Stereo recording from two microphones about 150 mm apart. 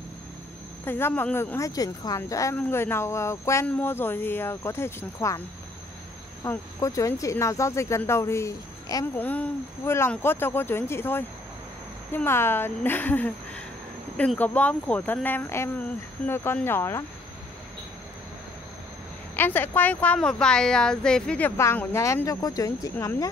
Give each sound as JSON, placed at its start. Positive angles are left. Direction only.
{"t": 0.8, "sound": "a woman's voice", "side_deg": 15}
{"t": 6.4, "sound": "speech", "side_deg": 20}
{"t": 9.1, "sound": "a woman's voice", "side_deg": 10}
{"t": 19.3, "sound": "a woman's voice", "side_deg": 15}